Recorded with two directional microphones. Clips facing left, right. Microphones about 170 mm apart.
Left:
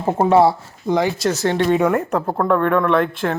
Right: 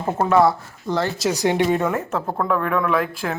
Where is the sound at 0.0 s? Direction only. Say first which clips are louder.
Left 3 dB; 30° left (ahead or behind).